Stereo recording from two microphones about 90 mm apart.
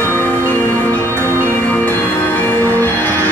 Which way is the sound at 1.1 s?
30° right (ahead or behind).